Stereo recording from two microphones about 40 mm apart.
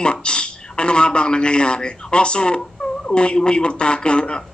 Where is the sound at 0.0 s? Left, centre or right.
Left.